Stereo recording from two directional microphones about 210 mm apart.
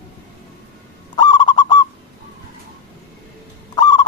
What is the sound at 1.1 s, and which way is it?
Owl, 20° left (ahead or behind).